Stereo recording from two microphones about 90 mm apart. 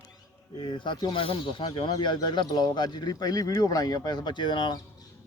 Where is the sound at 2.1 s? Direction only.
55° left (ahead or behind).